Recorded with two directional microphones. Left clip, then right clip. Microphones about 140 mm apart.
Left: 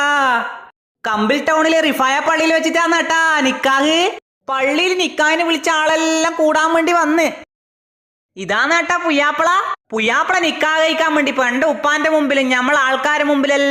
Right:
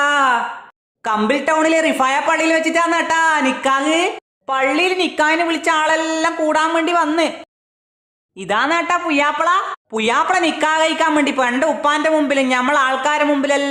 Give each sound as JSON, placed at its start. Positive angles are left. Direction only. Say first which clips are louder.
{"t": 0.0, "sound": "sigh", "louder": "even", "side_deg": 30}
{"t": 1.3, "sound": "speech", "louder": "left 2 dB", "side_deg": 25}
{"t": 3.6, "sound": "speech", "louder": "left 2 dB", "side_deg": 45}
{"t": 4.4, "sound": "speech", "louder": "even", "side_deg": 15}
{"t": 8.4, "sound": "a woman's voice", "louder": "left 2 dB", "side_deg": 5}
{"t": 9.4, "sound": "a woman's voice", "louder": "left 2 dB", "side_deg": 40}
{"t": 9.9, "sound": "a woman's voice", "louder": "even", "side_deg": 15}